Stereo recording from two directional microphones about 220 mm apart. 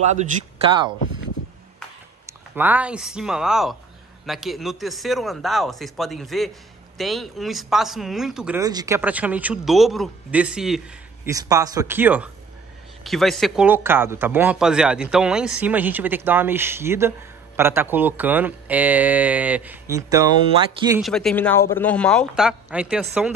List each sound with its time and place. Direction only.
0.0 s speech: 30° right (ahead or behind)
2.2 s a man's voice: 10° right (ahead or behind)
8.5 s speech: 15° right (ahead or behind)
11.2 s speech: 15° right (ahead or behind)
21.0 s a man's voice: centre (ahead or behind)